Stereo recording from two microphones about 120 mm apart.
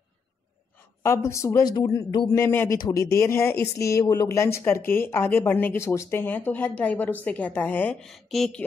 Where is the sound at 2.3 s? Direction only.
20° left (ahead or behind).